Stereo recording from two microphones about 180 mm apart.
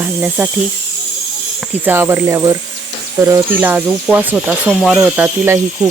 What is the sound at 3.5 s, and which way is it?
Speech, 10° right (ahead or behind).